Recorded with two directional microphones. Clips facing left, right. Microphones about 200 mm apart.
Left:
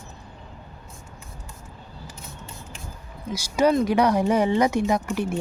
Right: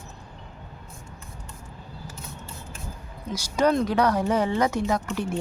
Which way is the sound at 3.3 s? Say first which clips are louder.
Left 2 dB; 10° left (ahead or behind).